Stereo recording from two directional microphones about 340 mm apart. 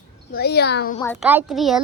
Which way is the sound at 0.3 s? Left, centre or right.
Left.